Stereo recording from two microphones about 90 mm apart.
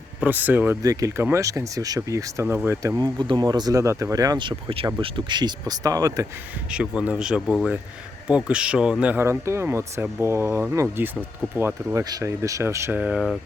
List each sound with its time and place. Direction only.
0.2 s speech: 20° right (ahead or behind)
0.8 s speech: 40° right (ahead or behind)
3.0 s speech: 60° right (ahead or behind); by 4.4 s 40° right (ahead or behind)
4.4 s speech: 75° right (ahead or behind)
4.9 s speech: 65° right (ahead or behind); by 6.2 s 40° right (ahead or behind)
6.7 s speech: 10° right (ahead or behind)
9.1 s speech: 30° right (ahead or behind)
11.9 s speech: 50° right (ahead or behind)
12.2 s speech: 35° right (ahead or behind)
13.0 s speech: 10° right (ahead or behind)